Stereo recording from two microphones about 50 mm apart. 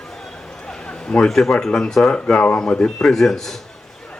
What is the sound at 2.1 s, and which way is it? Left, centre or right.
Speech, left.